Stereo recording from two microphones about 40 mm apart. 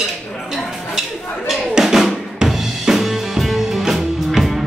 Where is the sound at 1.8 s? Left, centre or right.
Centre.